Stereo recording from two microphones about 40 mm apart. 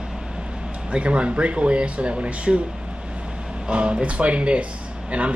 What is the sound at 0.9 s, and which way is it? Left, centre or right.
Speech, right.